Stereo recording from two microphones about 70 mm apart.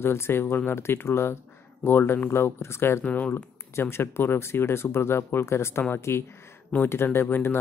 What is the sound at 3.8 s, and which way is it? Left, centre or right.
Speech, left.